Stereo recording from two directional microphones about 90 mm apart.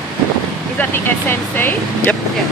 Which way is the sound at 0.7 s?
25° left (ahead or behind).